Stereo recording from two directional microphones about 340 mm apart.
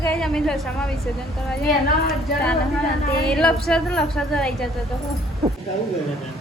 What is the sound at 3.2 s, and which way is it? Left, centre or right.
A woman's voice, centre.